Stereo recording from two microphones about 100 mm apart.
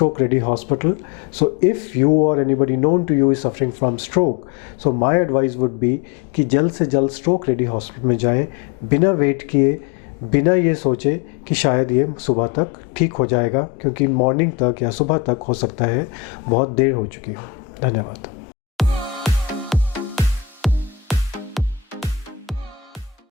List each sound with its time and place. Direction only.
0.0 s speech: 15° left (ahead or behind)
18.8 s music: centre (ahead or behind)